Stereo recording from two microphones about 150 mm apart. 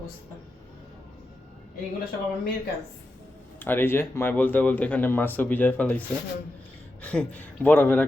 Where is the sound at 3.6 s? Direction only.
15° left (ahead or behind).